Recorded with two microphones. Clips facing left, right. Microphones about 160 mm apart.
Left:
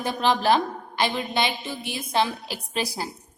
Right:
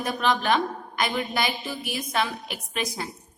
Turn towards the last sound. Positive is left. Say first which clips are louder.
# left 2 dB
turn(degrees=30)  # may be behind; listen again after turning